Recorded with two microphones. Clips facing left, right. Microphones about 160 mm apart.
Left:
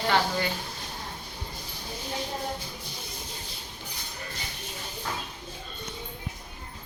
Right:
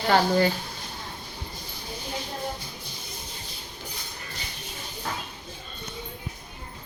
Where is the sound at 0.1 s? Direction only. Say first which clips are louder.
Right 7 dB; 40° right (ahead or behind).